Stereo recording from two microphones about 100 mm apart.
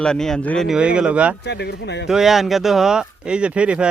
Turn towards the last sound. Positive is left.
turn(degrees=-10)  # may be behind; listen again after turning